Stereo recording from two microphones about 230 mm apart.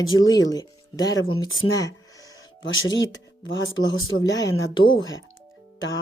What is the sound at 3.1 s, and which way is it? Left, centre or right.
Speech, left.